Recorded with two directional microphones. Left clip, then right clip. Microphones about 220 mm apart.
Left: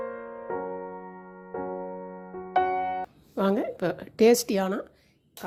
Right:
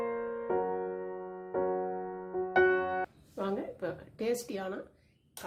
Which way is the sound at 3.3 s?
50° left (ahead or behind).